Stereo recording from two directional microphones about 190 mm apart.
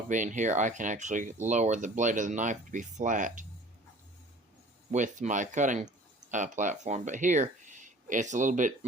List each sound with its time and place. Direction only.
0.1 s speech: 40° right (ahead or behind)
4.9 s speech: 40° right (ahead or behind)